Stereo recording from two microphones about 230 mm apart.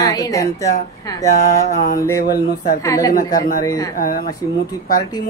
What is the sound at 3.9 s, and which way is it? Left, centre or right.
Speech, left.